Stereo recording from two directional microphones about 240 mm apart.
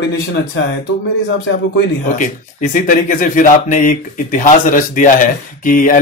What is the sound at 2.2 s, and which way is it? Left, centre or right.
Speech, left.